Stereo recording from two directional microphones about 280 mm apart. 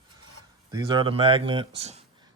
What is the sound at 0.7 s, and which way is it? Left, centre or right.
Speech, centre.